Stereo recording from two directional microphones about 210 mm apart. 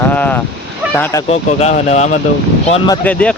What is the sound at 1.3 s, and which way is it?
Speech, 30° left (ahead or behind).